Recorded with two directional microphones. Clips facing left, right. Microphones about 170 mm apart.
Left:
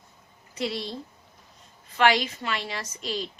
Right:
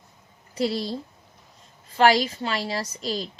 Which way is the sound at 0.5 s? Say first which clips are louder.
Right 5 dB; 35° right (ahead or behind).